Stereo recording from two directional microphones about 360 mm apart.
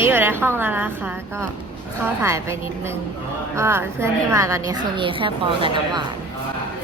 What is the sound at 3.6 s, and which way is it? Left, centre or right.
A woman's voice, centre.